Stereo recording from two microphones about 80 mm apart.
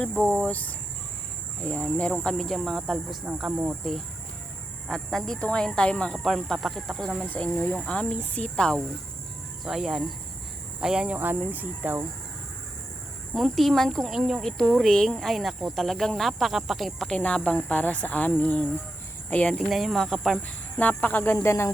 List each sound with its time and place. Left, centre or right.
0.2 s speech: centre
3.3 s speech: centre
3.7 s speech: centre
7.3 s speech: centre
9.6 s speech: centre
11.2 s speech: right
13.3 s speech: centre
17.1 s speech: centre
19.5 s speech: centre
20.7 s speech: left
21.3 s speech: left